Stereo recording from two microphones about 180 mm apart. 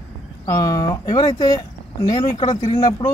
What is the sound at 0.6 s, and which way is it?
Speech, 20° left (ahead or behind).